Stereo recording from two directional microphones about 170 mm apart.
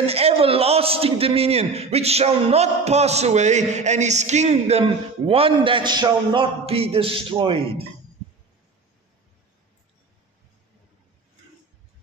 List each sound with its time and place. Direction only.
0.0 s a man's voice: 35° right (ahead or behind)